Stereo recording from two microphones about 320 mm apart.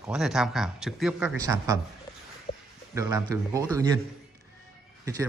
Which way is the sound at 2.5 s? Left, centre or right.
Centre.